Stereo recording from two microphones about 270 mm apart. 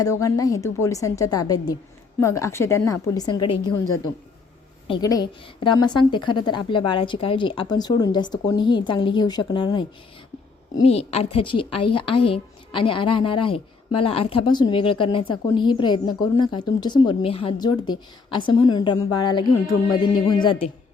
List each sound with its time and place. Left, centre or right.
0.0 s speech: centre
4.9 s speech: centre
10.8 s speech: left